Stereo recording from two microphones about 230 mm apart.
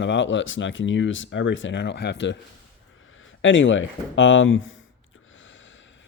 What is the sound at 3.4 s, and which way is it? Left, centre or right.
Speech, left.